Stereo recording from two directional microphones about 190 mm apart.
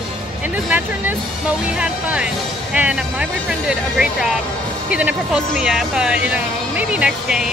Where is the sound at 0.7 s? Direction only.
10° right (ahead or behind).